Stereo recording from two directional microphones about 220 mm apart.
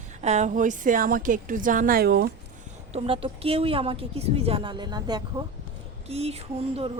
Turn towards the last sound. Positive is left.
turn(degrees=-25)  # may be behind; listen again after turning